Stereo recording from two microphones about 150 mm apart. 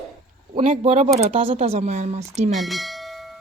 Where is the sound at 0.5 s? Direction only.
45° right (ahead or behind).